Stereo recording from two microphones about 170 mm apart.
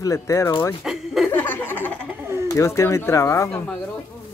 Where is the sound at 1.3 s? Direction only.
10° left (ahead or behind).